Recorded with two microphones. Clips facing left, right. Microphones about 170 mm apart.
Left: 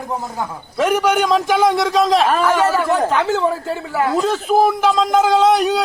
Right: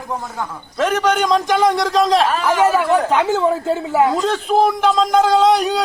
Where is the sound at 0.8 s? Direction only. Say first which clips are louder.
Left 1 dB; 10° left (ahead or behind).